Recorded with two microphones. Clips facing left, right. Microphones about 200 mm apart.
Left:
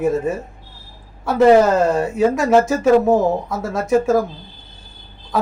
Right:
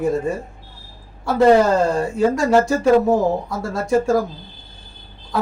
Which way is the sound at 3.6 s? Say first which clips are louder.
Left 2 dB; 20° left (ahead or behind).